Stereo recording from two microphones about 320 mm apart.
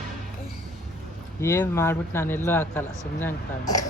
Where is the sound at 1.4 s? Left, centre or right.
Centre.